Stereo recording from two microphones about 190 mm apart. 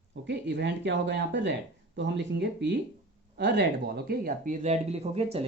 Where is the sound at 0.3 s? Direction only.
65° right (ahead or behind).